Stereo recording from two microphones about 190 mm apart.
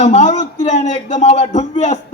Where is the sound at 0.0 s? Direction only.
35° left (ahead or behind).